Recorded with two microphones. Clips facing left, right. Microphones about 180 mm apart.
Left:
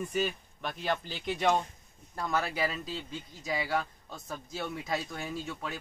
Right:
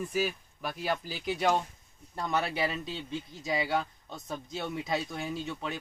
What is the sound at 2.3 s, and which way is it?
Speech, 25° right (ahead or behind).